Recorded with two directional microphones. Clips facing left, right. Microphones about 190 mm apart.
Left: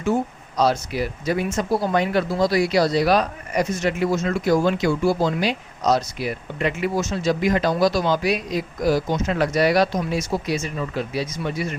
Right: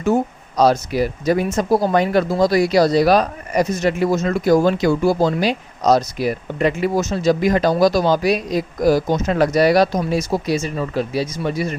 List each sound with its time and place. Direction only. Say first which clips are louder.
0.0 s speech: right 4 dB; 40° right (ahead or behind)